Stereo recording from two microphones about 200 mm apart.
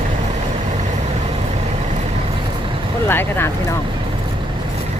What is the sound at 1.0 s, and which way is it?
Vehicle, 30° right (ahead or behind).